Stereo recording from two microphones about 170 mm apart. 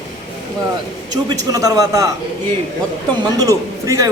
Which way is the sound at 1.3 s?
20° right (ahead or behind).